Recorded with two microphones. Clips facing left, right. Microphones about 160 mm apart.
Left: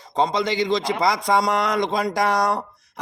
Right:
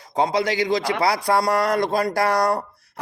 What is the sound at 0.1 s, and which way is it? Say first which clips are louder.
A man's voice: right 1 dB; 10° right (ahead or behind).